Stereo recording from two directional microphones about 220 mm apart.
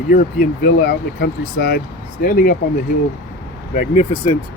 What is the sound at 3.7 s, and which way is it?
Speech, 35° left (ahead or behind).